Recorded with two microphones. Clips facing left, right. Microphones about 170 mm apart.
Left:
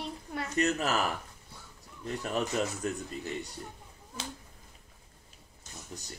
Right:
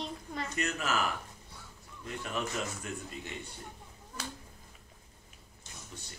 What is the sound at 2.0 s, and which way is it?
Speech, 40° left (ahead or behind).